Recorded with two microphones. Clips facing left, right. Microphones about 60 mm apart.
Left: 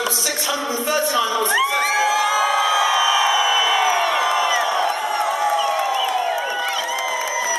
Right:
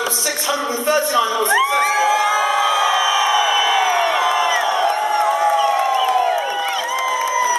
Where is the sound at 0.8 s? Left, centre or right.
Centre.